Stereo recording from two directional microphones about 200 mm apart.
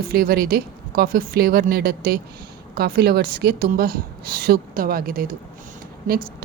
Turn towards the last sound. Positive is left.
turn(degrees=-45)  # may be behind; listen again after turning